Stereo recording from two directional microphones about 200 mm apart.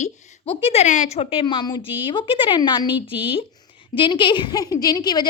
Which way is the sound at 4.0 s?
25° left (ahead or behind).